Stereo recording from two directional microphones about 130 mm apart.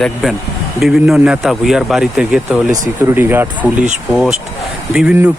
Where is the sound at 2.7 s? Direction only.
20° right (ahead or behind).